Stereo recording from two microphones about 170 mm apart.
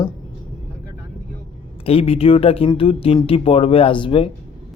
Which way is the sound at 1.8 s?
35° left (ahead or behind).